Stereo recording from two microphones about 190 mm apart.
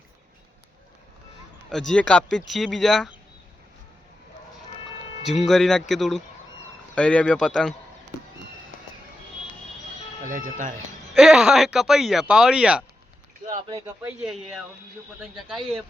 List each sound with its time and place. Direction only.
1.9 s speech: 5° left (ahead or behind)
5.4 s speech: centre (ahead or behind)
10.2 s speech: 45° right (ahead or behind)
11.1 s speech: centre (ahead or behind)
13.6 s speech: 30° right (ahead or behind)
13.8 s speech: 10° right (ahead or behind)